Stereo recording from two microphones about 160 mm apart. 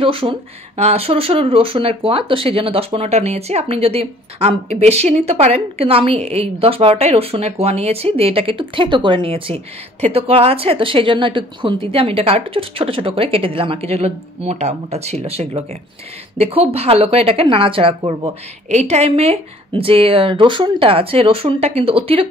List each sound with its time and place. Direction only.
0.0 s speech: 35° right (ahead or behind)